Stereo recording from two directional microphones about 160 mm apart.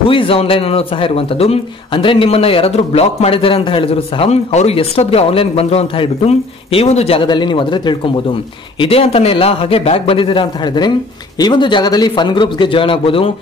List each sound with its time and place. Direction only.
0.0 s a man's voice: 35° left (ahead or behind)